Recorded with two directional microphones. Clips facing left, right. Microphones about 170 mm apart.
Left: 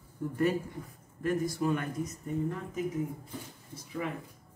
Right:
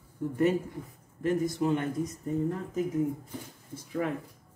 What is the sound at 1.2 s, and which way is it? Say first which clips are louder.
Speech: right 2 dB; 20° right (ahead or behind).